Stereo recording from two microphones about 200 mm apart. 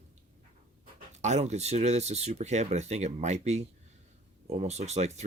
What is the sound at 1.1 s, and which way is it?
Speech, 35° right (ahead or behind).